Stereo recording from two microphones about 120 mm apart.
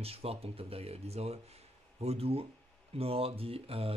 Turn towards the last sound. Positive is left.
turn(degrees=-55)  # may be behind; listen again after turning